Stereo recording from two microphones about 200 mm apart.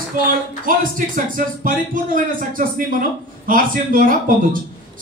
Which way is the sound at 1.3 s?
45° right (ahead or behind).